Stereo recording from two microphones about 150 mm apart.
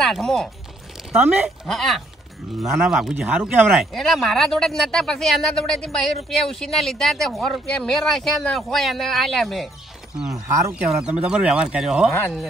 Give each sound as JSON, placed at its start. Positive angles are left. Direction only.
{"t": 0.0, "sound": "speech", "side_deg": 0}
{"t": 1.1, "sound": "speech", "side_deg": -10}
{"t": 1.7, "sound": "speech", "side_deg": 0}
{"t": 10.3, "sound": "speech", "side_deg": -20}
{"t": 10.7, "sound": "speech", "side_deg": -5}